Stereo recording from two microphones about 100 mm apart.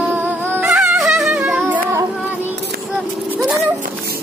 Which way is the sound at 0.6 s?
5° right (ahead or behind).